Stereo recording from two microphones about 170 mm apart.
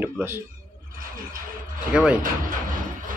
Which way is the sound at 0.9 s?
55° right (ahead or behind).